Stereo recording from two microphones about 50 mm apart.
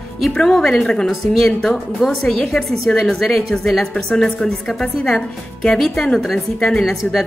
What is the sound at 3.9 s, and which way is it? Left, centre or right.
A woman's voice, centre.